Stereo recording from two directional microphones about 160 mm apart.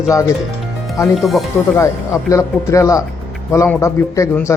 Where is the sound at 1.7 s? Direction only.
20° left (ahead or behind).